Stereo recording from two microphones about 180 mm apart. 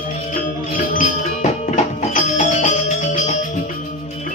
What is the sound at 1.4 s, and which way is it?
Music, 45° left (ahead or behind).